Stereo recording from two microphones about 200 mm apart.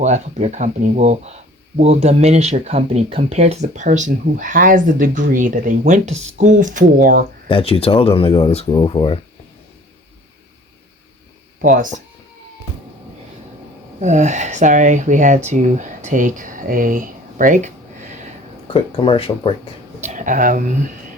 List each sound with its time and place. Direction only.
0.0 s speech: 35° right (ahead or behind)
7.4 s speech: 30° left (ahead or behind)
11.6 s speech: 40° right (ahead or behind)
14.0 s speech: 35° right (ahead or behind)
18.7 s speech: 25° left (ahead or behind)
20.0 s speech: 40° right (ahead or behind)